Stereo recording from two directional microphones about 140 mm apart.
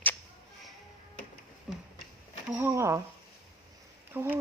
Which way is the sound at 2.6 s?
20° right (ahead or behind).